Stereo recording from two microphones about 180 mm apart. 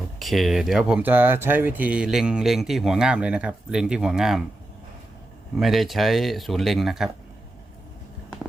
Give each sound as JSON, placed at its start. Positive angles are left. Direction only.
{"t": 0.2, "sound": "speech", "side_deg": 0}
{"t": 5.5, "sound": "speech", "side_deg": 0}